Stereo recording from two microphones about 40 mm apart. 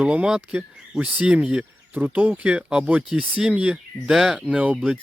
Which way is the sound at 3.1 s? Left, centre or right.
Right.